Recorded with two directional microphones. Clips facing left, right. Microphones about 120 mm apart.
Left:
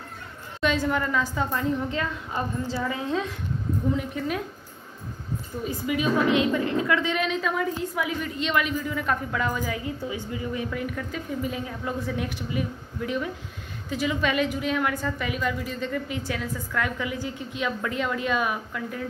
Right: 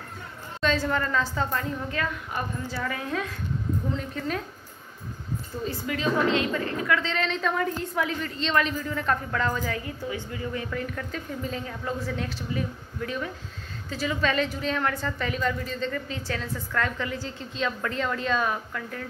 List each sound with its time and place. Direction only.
0.6 s a woman's voice: 15° left (ahead or behind)
5.9 s a woman's voice: 15° left (ahead or behind)